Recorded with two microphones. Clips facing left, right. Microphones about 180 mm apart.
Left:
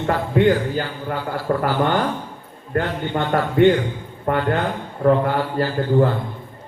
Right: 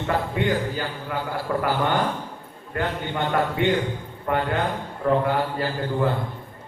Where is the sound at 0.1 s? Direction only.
50° left (ahead or behind).